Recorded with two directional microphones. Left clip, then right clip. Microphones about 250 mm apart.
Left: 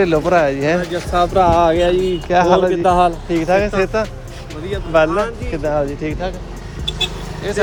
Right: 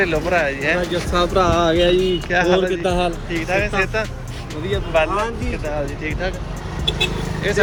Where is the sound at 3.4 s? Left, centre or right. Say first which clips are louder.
Left 4 dB; left.